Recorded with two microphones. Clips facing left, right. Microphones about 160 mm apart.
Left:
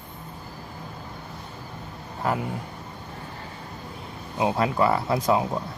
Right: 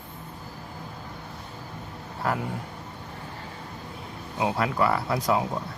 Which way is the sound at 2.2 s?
20° left (ahead or behind).